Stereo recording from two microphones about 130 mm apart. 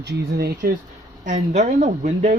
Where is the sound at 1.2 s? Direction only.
70° right (ahead or behind).